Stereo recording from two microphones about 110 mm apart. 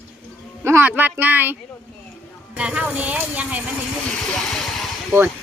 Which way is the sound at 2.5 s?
10° right (ahead or behind).